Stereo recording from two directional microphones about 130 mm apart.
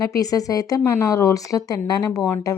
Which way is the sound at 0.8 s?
15° left (ahead or behind).